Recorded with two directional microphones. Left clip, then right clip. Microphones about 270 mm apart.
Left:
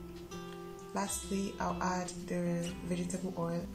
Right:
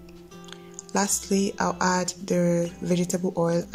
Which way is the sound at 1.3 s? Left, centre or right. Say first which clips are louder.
Right 11 dB; right.